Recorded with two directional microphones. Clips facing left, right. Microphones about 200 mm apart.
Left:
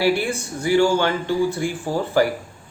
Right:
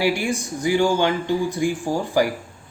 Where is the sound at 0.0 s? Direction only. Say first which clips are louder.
Left 1 dB; 15° right (ahead or behind).